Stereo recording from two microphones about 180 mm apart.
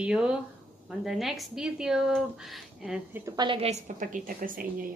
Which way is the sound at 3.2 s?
25° right (ahead or behind).